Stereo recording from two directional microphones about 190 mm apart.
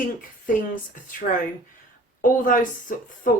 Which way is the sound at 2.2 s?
45° left (ahead or behind).